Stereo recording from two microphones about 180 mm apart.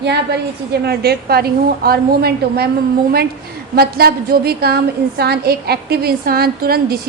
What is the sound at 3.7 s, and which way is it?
A woman's voice, 60° right (ahead or behind).